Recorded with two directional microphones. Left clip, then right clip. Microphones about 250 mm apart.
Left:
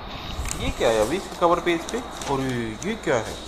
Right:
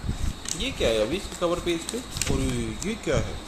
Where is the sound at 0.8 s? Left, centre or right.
Centre.